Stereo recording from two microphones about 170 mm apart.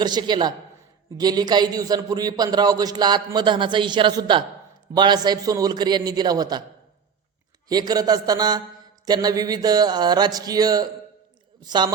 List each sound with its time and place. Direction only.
0.0 s a man's voice: 25° right (ahead or behind)
7.7 s a man's voice: 25° right (ahead or behind)